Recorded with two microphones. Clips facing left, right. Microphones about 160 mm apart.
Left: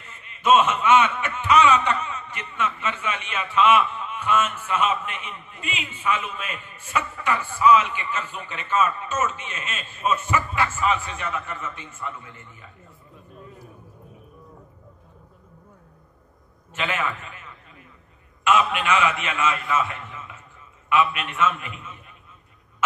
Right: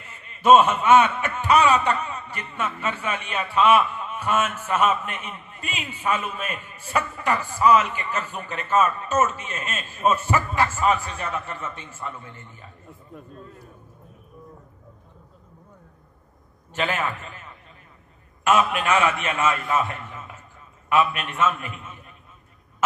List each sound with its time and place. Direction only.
0.0 s a man's voice: 35° right (ahead or behind)
13.4 s a man's voice: 10° left (ahead or behind)
16.7 s a man's voice: 40° right (ahead or behind)
20.9 s a man's voice: 40° right (ahead or behind)